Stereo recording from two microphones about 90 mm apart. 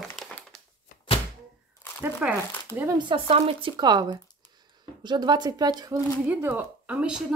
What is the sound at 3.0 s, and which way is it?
Speech, 75° right (ahead or behind).